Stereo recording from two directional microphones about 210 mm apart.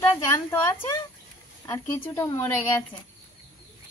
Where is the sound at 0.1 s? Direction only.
10° left (ahead or behind).